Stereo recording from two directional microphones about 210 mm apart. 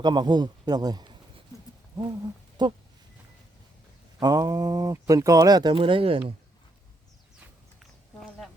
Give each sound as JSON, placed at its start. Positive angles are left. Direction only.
{"t": 0.0, "sound": "a man's voice", "side_deg": -20}
{"t": 2.6, "sound": "a man's voice", "side_deg": -20}
{"t": 4.2, "sound": "speech", "side_deg": -20}
{"t": 7.8, "sound": "a sound", "side_deg": 0}